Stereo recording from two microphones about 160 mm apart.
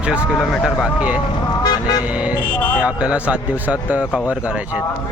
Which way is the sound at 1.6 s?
25° left (ahead or behind).